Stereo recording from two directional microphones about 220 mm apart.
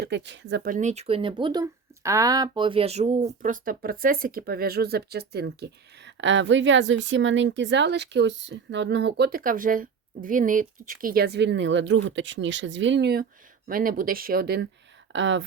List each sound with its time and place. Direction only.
0.0 s speech: 50° right (ahead or behind)
13.7 s speech: 40° right (ahead or behind)
15.1 s speech: 60° right (ahead or behind)